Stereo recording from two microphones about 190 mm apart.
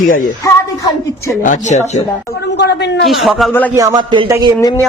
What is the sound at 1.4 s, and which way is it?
Speech, 40° left (ahead or behind).